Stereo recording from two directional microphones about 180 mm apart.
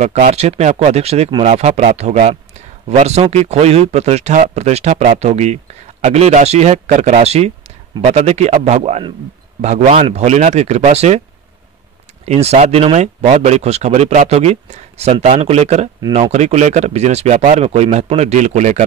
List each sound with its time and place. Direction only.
0.0 s speech: 40° right (ahead or behind)
12.3 s speech: 35° right (ahead or behind)